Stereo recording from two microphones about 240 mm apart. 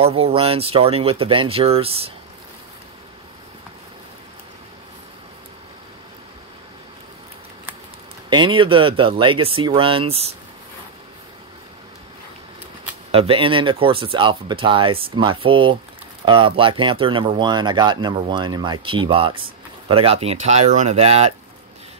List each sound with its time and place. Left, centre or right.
0.0 s speech: right
8.3 s speech: centre
13.1 s speech: right